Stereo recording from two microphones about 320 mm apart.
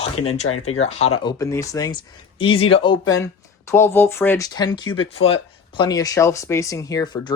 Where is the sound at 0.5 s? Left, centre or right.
Centre.